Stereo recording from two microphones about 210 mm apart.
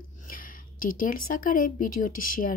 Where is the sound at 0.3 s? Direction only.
40° left (ahead or behind).